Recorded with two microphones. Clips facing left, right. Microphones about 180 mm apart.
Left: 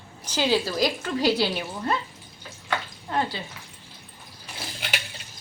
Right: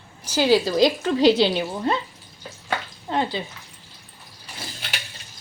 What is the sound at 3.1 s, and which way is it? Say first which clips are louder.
Speech: right 3 dB; 20° right (ahead or behind).